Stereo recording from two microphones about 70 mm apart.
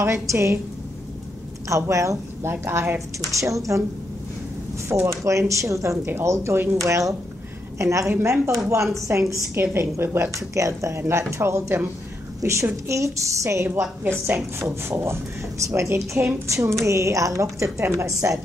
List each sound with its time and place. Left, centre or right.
0.0 s speech: right
1.7 s speech: right
3.2 s speech: right
4.8 s speech: right
6.0 s speech: right
8.1 s speech: right
8.5 s speech: right
10.3 s a woman's voice: right
13.7 s speech: right